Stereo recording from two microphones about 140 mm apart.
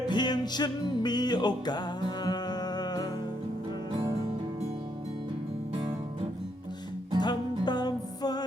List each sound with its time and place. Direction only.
0.1 s music: 30° left (ahead or behind)
7.2 s music: 30° left (ahead or behind)